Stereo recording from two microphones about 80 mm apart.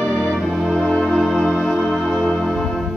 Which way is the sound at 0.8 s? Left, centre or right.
Centre.